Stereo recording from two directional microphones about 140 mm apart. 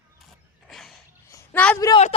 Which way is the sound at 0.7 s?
Centre (ahead or behind).